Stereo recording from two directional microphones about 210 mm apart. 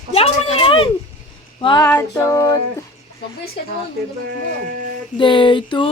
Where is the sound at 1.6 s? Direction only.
20° left (ahead or behind).